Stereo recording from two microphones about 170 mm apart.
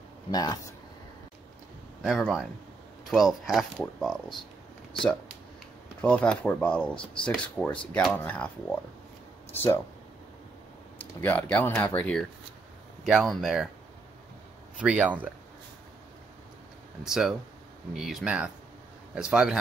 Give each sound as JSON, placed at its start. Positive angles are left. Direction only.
{"t": 0.3, "sound": "speech", "side_deg": 25}
{"t": 2.0, "sound": "speech", "side_deg": 0}
{"t": 5.9, "sound": "speech", "side_deg": 5}
{"t": 11.0, "sound": "speech", "side_deg": 10}
{"t": 14.8, "sound": "speech", "side_deg": -10}
{"t": 17.0, "sound": "speech", "side_deg": -5}